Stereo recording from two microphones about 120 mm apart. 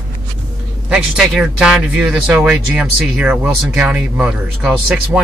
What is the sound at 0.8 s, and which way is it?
Speech, 5° right (ahead or behind).